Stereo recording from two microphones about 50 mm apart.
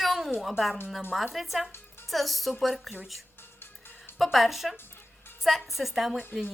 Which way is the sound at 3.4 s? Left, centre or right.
Left.